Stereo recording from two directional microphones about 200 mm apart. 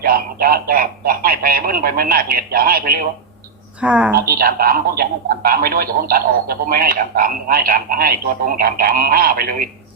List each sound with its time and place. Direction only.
0.0 s a man's voice: 45° right (ahead or behind)
3.8 s a woman's voice: 5° right (ahead or behind)
4.1 s a man's voice: 45° right (ahead or behind)